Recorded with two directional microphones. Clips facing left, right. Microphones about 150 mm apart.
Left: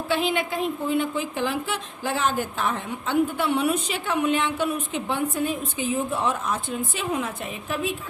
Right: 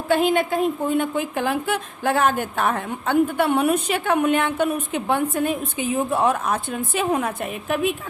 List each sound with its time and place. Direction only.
0.1 s a woman's voice: 45° right (ahead or behind)